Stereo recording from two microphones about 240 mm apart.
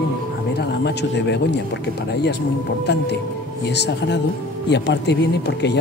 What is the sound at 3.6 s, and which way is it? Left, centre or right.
Speech, left.